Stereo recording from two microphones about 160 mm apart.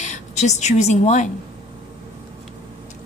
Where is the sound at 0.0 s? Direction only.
45° left (ahead or behind).